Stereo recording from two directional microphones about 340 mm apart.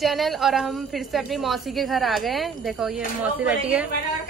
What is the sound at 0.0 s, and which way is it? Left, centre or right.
A woman's voice, centre.